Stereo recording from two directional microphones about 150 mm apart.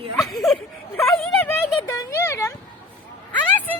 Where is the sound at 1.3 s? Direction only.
15° left (ahead or behind).